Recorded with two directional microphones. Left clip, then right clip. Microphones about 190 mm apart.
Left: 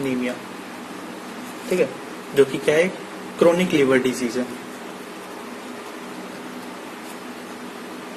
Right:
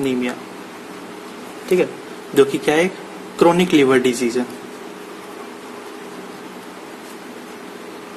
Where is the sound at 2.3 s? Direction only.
55° right (ahead or behind).